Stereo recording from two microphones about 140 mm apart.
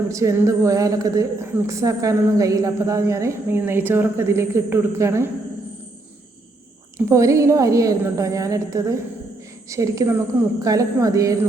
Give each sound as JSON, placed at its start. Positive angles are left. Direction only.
{"t": 0.1, "sound": "a woman's voice", "side_deg": -20}
{"t": 7.1, "sound": "a woman's voice", "side_deg": -20}